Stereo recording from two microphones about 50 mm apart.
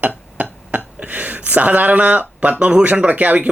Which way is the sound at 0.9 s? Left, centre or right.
Right.